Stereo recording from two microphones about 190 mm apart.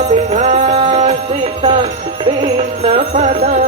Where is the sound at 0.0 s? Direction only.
40° right (ahead or behind).